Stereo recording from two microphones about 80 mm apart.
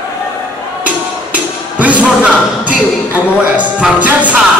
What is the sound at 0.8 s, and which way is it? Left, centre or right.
Music, centre.